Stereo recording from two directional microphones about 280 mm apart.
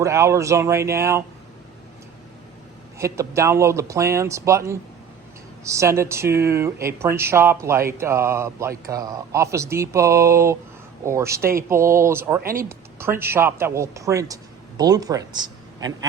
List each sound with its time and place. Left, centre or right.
0.0 s speech: centre
3.0 s speech: centre
11.3 s speech: right
11.5 s speech: centre
12.4 s speech: right
12.6 s a man's voice: centre